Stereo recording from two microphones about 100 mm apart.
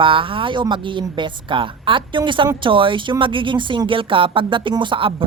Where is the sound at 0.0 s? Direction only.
60° right (ahead or behind).